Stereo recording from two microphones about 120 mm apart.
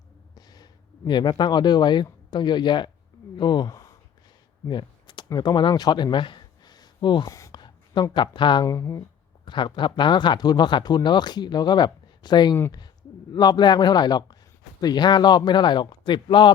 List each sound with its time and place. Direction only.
0.3 s a sound: 35° left (ahead or behind)
2.3 s speech: 40° left (ahead or behind)
7.5 s a sound: 40° left (ahead or behind)
8.1 s speech: 40° left (ahead or behind)
8.6 s speech: 25° left (ahead or behind)
9.5 s speech: 40° left (ahead or behind)